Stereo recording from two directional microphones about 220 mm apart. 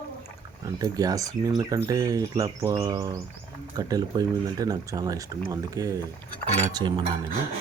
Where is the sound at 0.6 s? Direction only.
15° right (ahead or behind).